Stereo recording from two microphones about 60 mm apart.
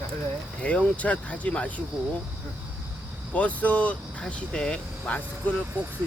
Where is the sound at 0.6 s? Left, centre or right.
Left.